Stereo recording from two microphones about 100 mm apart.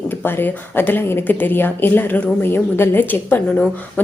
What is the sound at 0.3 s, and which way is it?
Speech, 20° left (ahead or behind).